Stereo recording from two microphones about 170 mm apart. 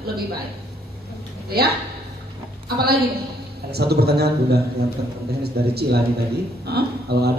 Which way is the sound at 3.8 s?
70° right (ahead or behind).